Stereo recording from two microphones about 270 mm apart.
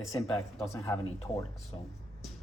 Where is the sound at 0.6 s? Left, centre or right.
Centre.